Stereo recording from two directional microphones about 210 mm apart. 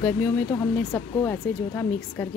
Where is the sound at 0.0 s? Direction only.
10° left (ahead or behind).